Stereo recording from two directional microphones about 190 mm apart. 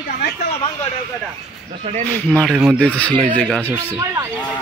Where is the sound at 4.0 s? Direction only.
15° right (ahead or behind).